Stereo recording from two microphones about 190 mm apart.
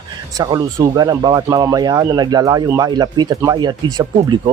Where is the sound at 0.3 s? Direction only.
20° right (ahead or behind).